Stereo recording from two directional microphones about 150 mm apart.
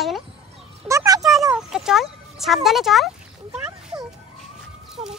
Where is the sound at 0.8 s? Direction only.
20° right (ahead or behind).